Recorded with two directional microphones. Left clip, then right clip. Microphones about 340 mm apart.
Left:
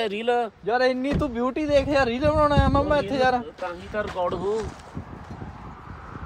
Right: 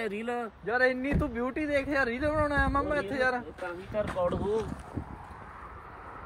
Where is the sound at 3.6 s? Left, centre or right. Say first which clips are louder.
Left 4 dB; left.